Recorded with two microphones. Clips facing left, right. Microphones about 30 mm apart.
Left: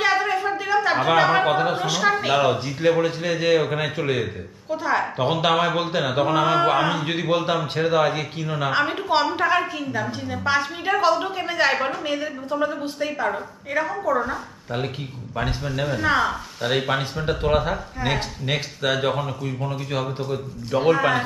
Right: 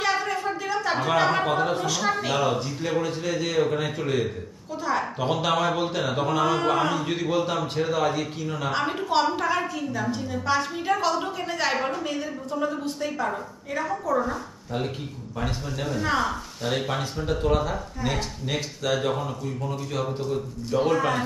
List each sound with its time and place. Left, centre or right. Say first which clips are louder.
0.0 s speech: left 4 dB; left
16.7 s speech: left 5 dB; left